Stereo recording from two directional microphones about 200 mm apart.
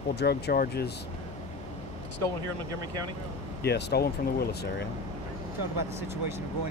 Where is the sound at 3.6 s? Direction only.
55° left (ahead or behind).